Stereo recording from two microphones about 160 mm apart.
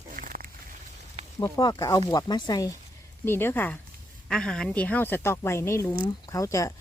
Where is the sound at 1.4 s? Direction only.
25° left (ahead or behind).